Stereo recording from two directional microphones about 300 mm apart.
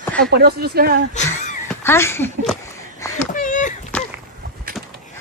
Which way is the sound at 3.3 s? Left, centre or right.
Left.